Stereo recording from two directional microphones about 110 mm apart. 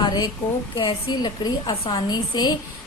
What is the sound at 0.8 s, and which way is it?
A woman's voice, 40° left (ahead or behind).